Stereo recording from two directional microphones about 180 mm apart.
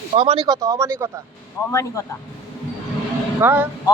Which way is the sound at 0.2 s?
25° right (ahead or behind).